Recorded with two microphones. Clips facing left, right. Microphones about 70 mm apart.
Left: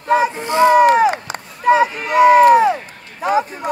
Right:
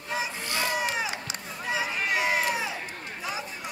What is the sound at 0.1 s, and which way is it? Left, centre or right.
Boat, left.